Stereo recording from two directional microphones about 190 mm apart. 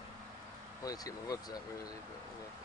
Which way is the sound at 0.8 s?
20° left (ahead or behind).